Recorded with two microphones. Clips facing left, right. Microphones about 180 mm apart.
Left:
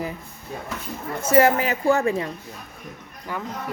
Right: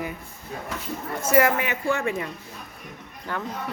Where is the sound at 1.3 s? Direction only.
30° left (ahead or behind).